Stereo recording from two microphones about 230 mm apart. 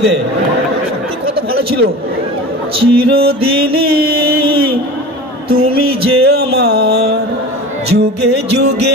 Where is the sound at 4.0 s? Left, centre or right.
Right.